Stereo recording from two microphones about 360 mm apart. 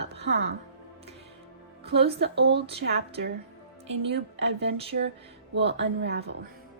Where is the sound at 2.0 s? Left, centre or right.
Right.